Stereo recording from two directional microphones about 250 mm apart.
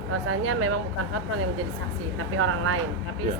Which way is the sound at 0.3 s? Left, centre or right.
Right.